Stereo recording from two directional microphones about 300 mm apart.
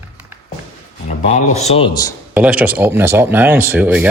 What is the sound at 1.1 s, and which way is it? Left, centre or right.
Speech, left.